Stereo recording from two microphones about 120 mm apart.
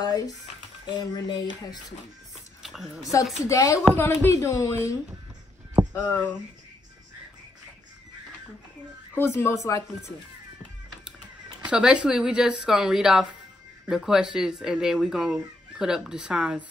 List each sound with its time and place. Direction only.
0.8 s speech: 35° left (ahead or behind)
2.6 s a sound: centre (ahead or behind)
3.1 s speech: 25° left (ahead or behind)
5.9 s speech: 15° left (ahead or behind)
9.1 s speech: 20° left (ahead or behind)
11.6 s speech: 10° right (ahead or behind)